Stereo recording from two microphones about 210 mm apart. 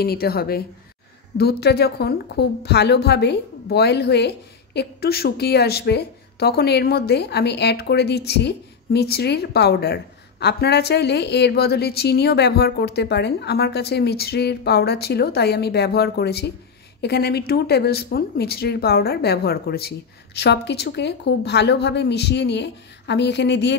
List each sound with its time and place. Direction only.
0.0 s a woman's voice: 45° left (ahead or behind)